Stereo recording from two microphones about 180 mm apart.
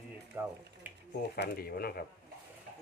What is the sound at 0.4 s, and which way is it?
Mechanisms, 10° right (ahead or behind).